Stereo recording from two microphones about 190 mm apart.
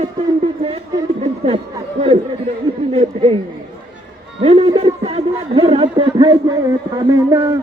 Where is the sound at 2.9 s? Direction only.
30° right (ahead or behind).